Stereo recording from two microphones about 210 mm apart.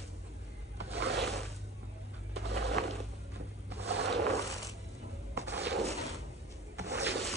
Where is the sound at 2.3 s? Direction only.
50° right (ahead or behind).